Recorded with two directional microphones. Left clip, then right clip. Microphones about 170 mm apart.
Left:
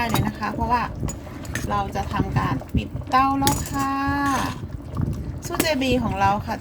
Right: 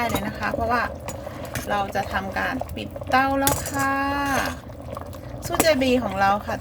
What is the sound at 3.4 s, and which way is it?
Child singing, 15° right (ahead or behind).